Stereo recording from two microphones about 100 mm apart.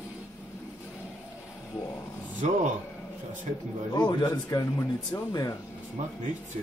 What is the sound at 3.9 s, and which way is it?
Speech, 40° left (ahead or behind).